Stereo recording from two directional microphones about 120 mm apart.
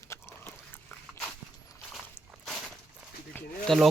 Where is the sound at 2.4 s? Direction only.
Centre (ahead or behind).